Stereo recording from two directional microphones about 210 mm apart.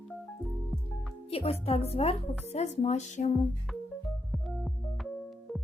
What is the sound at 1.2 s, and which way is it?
Speech, 30° left (ahead or behind).